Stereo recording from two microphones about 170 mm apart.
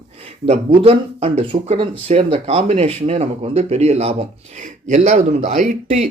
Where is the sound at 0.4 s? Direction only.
35° right (ahead or behind).